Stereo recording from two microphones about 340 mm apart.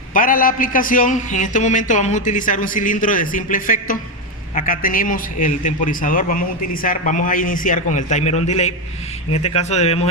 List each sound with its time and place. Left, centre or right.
0.1 s a man's voice: left